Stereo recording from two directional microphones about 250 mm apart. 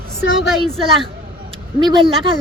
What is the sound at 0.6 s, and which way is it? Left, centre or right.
A woman's voice, right.